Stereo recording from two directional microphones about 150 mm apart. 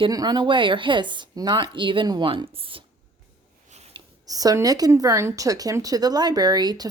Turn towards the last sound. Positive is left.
turn(degrees=-25)  # may be behind; listen again after turning